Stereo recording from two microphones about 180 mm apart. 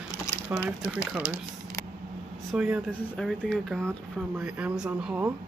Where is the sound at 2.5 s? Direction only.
5° right (ahead or behind).